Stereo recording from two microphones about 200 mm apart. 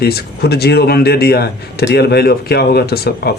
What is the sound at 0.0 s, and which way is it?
Speech, 55° left (ahead or behind).